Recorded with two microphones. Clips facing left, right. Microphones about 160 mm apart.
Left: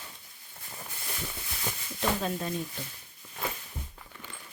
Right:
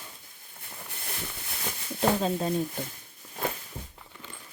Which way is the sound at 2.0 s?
30° right (ahead or behind).